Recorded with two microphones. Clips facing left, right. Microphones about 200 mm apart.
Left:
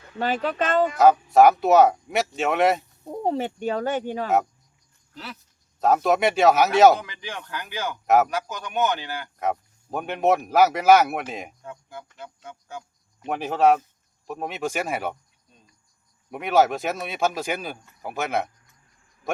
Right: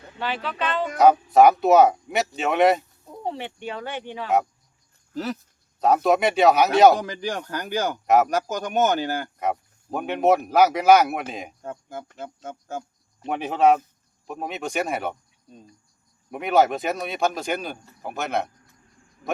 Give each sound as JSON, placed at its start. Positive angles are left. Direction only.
{"t": 0.2, "sound": "speech", "side_deg": 45}
{"t": 0.9, "sound": "speech", "side_deg": 0}
{"t": 3.1, "sound": "speech", "side_deg": 45}
{"t": 5.1, "sound": "speech", "side_deg": -45}
{"t": 5.8, "sound": "speech", "side_deg": 0}
{"t": 7.0, "sound": "speech", "side_deg": -40}
{"t": 8.0, "sound": "speech", "side_deg": 0}
{"t": 8.3, "sound": "speech", "side_deg": -45}
{"t": 9.4, "sound": "speech", "side_deg": 0}
{"t": 11.6, "sound": "speech", "side_deg": -45}
{"t": 13.2, "sound": "speech", "side_deg": 0}
{"t": 16.3, "sound": "speech", "side_deg": 0}